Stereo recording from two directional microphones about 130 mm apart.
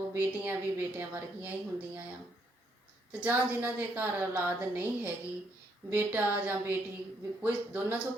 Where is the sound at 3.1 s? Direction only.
15° right (ahead or behind).